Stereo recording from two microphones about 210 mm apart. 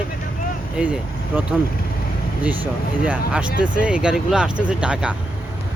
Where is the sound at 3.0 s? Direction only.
5° right (ahead or behind).